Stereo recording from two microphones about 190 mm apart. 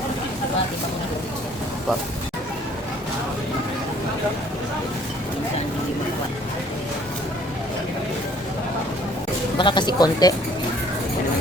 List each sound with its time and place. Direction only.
9.6 s speech: 25° left (ahead or behind)